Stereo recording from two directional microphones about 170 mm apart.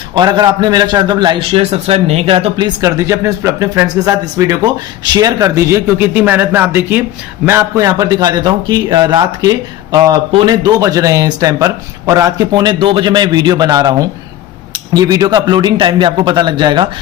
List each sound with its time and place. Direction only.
0.1 s a man's voice: 25° right (ahead or behind)